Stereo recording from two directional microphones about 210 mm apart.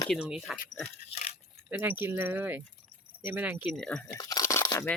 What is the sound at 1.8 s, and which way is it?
Speech, 10° right (ahead or behind).